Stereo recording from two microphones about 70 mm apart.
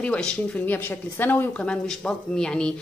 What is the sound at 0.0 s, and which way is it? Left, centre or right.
Speech, centre.